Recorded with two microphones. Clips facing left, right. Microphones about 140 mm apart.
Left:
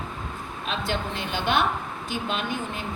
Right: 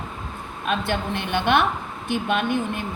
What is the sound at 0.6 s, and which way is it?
A woman's voice, 55° right (ahead or behind).